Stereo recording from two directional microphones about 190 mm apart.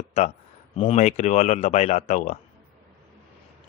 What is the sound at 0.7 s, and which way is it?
Speech, 35° left (ahead or behind).